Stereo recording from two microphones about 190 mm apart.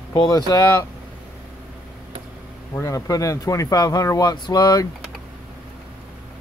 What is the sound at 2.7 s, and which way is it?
Speech, 15° left (ahead or behind).